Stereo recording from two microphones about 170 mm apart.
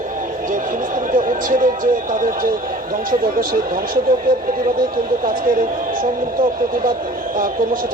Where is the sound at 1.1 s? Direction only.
50° right (ahead or behind).